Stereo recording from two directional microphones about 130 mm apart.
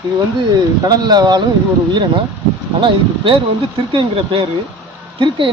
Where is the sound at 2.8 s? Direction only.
40° right (ahead or behind).